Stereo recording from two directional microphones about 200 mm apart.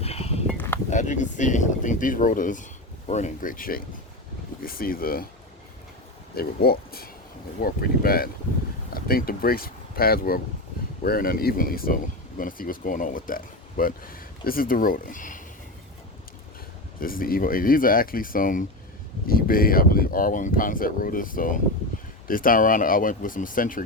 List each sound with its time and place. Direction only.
0.0 s a sound: 30° left (ahead or behind)
0.9 s speech: 35° left (ahead or behind)
6.3 s speech: 50° left (ahead or behind)
17.0 s speech: 45° left (ahead or behind)